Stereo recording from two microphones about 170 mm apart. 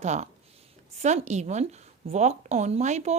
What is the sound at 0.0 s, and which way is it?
Speech, 40° right (ahead or behind).